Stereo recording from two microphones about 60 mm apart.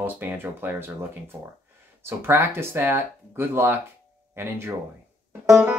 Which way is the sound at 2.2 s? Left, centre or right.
Right.